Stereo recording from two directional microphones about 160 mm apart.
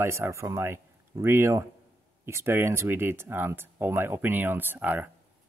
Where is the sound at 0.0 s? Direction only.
15° right (ahead or behind).